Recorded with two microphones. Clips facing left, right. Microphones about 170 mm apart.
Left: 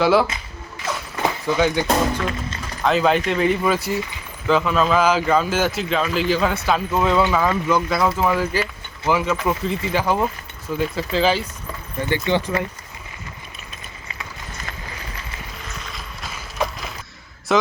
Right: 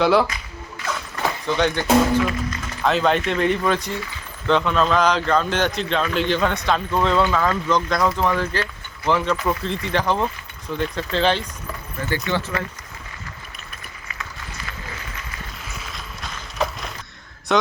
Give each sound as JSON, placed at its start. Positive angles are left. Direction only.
{"t": 0.0, "sound": "a man's voice", "side_deg": 0}
{"t": 1.1, "sound": "a sound", "side_deg": 10}
{"t": 2.8, "sound": "a man's voice", "side_deg": 0}
{"t": 12.1, "sound": "speech", "side_deg": 20}
{"t": 15.8, "sound": "run", "side_deg": 0}
{"t": 17.5, "sound": "speech", "side_deg": 0}